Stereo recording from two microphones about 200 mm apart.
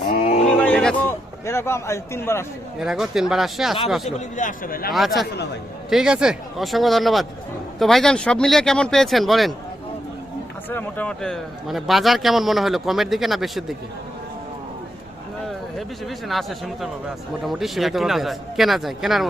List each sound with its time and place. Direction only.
0.5 s a sound: 5° left (ahead or behind)
2.7 s a man's voice: 5° right (ahead or behind)
4.4 s a man's voice: 40° left (ahead or behind)
4.9 s a man's voice: centre (ahead or behind)
10.7 s a man's voice: 10° left (ahead or behind)
16.0 s a man's voice: centre (ahead or behind)